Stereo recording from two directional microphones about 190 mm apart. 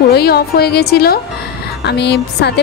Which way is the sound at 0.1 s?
55° left (ahead or behind).